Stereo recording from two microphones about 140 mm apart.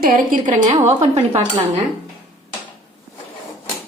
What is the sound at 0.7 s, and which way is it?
Speech, 50° right (ahead or behind).